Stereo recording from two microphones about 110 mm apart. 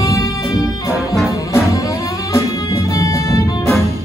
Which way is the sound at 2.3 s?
30° left (ahead or behind).